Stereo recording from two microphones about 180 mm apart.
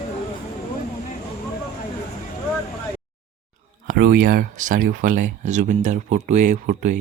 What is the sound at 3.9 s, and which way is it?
Speech, 50° right (ahead or behind).